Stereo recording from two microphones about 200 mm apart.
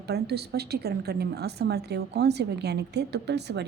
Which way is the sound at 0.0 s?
55° right (ahead or behind).